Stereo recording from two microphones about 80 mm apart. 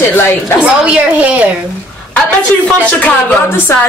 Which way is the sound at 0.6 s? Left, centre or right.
Centre.